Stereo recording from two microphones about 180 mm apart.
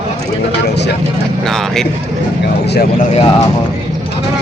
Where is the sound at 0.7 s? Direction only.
70° left (ahead or behind).